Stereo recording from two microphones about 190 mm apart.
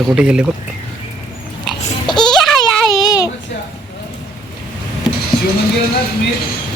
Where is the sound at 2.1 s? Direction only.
25° left (ahead or behind).